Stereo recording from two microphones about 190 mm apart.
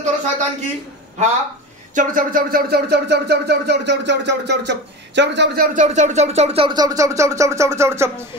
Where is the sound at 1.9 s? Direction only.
45° right (ahead or behind); by 5.6 s 65° right (ahead or behind).